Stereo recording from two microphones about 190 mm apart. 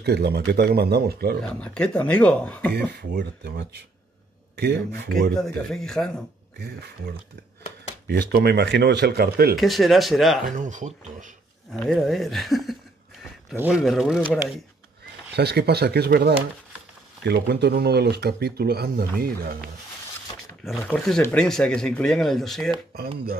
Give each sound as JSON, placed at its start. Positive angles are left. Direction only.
{"t": 0.0, "sound": "speech", "side_deg": -60}
{"t": 1.5, "sound": "speech", "side_deg": 5}
{"t": 2.9, "sound": "speech", "side_deg": -60}
{"t": 5.3, "sound": "speech", "side_deg": 0}
{"t": 6.6, "sound": "speech", "side_deg": -55}
{"t": 9.6, "sound": "speech", "side_deg": 0}
{"t": 10.5, "sound": "speech", "side_deg": -40}
{"t": 11.7, "sound": "speech", "side_deg": 5}
{"t": 15.3, "sound": "speech", "side_deg": -60}
{"t": 20.6, "sound": "speech", "side_deg": 0}